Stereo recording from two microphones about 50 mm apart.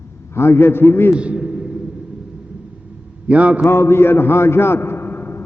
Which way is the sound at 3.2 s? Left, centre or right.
Right.